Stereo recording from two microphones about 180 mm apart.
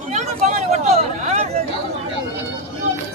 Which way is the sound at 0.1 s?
40° right (ahead or behind).